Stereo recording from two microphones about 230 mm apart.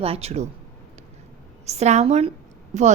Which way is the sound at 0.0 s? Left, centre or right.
Right.